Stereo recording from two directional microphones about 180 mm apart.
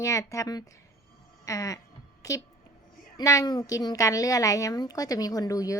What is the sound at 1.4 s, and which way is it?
Music, 20° left (ahead or behind).